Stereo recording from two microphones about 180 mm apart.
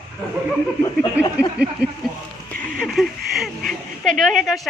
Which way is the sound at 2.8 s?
Centre (ahead or behind).